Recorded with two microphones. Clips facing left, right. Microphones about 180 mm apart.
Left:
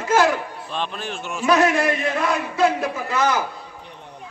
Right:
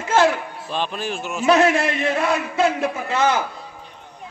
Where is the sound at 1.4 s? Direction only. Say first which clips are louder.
Right 1 dB; 25° right (ahead or behind).